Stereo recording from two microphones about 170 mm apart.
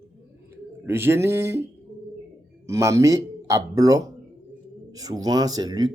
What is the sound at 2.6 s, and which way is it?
Speech, 15° right (ahead or behind).